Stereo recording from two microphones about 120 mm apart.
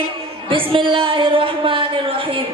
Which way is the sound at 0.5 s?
45° right (ahead or behind).